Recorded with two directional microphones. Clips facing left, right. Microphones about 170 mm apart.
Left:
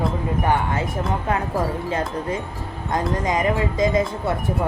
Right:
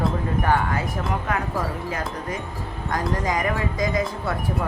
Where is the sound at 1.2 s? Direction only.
25° left (ahead or behind).